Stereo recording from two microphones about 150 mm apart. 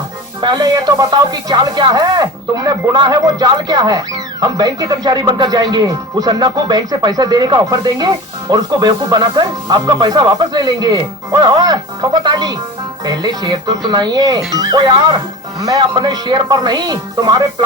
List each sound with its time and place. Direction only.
0.4 s speech: 30° right (ahead or behind)